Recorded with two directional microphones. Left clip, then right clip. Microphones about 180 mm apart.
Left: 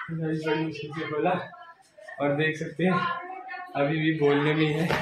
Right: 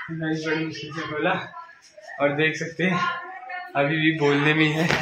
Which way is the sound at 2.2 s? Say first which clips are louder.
Right 4 dB; 15° right (ahead or behind).